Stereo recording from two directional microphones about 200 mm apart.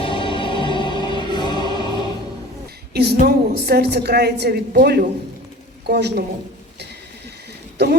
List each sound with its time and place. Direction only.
0.0 s music: 25° left (ahead or behind)
2.9 s a woman's voice: 50° right (ahead or behind)